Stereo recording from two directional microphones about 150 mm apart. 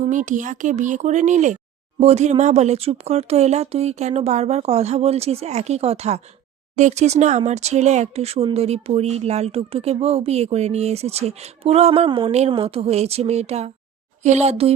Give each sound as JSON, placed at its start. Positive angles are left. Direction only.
{"t": 0.0, "sound": "speech", "side_deg": -55}